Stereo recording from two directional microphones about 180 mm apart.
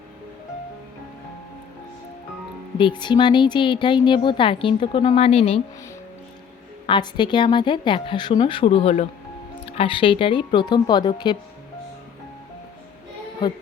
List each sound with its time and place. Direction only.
2.7 s speech: 25° left (ahead or behind)
6.8 s speech: 25° left (ahead or behind)